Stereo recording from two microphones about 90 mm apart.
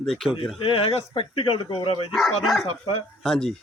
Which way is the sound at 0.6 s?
90° left.